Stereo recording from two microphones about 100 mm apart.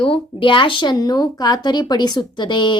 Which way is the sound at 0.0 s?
60° left (ahead or behind).